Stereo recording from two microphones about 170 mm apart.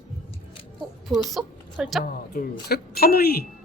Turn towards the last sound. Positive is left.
turn(degrees=65)  # may be behind; listen again after turning